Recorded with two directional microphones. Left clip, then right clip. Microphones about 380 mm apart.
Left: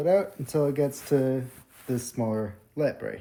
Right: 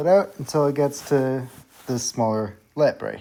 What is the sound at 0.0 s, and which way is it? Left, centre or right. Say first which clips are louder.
Speech: right 5 dB; centre.